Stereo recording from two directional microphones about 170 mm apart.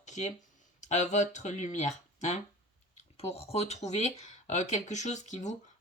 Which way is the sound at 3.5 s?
40° left (ahead or behind).